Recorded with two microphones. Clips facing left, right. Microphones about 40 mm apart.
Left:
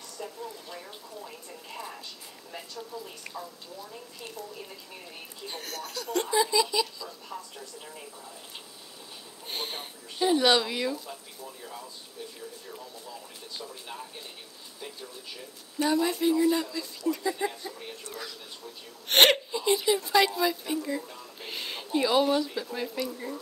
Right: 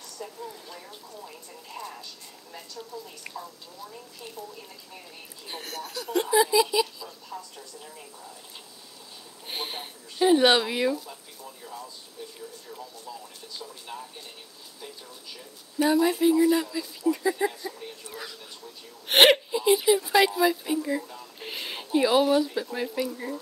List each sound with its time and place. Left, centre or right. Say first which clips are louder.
0.2 s speech: even; centre
3.3 s speech: even; centre
7.3 s speech: right 2 dB; centre
9.5 s speech: right 1 dB; centre
11.4 s speech: right 1 dB; centre
13.9 s speech: right 3 dB; left
15.8 s speech: right 4 dB; centre